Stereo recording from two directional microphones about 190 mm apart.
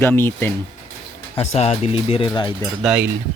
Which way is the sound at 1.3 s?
35° left (ahead or behind).